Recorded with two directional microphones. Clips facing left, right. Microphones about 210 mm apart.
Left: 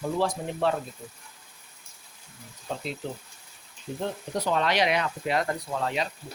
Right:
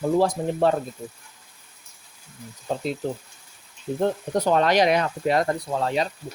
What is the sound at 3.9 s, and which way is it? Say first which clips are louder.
Speech: right 8 dB; 50° right (ahead or behind).